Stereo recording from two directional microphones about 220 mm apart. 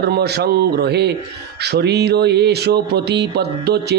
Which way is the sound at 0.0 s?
45° right (ahead or behind).